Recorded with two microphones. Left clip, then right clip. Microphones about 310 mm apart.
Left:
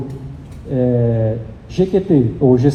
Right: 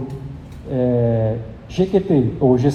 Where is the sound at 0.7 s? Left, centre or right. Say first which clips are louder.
Left 1 dB; right.